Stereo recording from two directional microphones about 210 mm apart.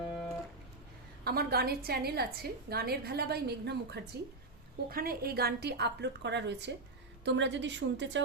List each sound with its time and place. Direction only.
1.2 s a woman's voice: 45° right (ahead or behind)